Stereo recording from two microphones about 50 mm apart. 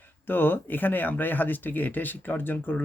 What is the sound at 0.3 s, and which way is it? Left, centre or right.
Speech, left.